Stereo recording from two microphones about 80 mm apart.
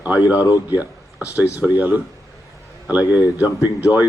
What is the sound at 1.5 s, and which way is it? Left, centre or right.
Speech, centre.